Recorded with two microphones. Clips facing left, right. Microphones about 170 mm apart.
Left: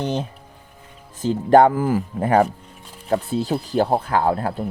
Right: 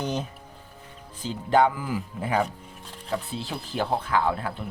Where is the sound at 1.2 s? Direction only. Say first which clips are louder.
Left 8 dB; 50° left (ahead or behind).